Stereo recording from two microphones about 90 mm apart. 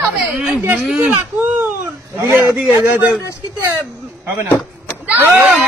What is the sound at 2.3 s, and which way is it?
Speech, 25° right (ahead or behind).